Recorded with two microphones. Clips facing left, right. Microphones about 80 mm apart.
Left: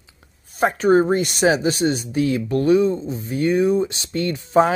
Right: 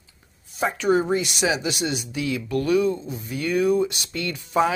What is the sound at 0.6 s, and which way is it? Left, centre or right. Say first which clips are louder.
Speech: left 5 dB; left.